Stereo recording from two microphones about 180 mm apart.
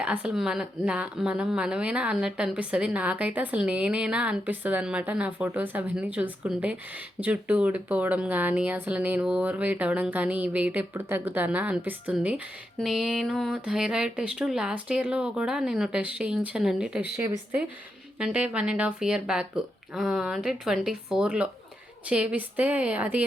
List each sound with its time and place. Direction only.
0.0 s a woman's voice: 5° right (ahead or behind)
17.2 s a woman's voice: 15° right (ahead or behind)